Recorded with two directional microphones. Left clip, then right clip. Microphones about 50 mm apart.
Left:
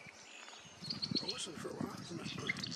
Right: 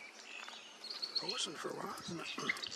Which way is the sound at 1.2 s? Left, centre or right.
Right.